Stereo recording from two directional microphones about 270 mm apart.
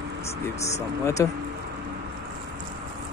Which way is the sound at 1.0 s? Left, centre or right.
Centre.